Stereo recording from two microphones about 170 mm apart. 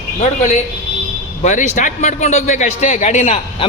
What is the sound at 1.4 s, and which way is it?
A man's voice, 45° left (ahead or behind).